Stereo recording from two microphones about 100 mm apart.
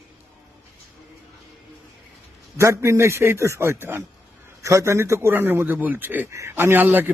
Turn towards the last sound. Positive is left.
turn(degrees=-20)  # may be behind; listen again after turning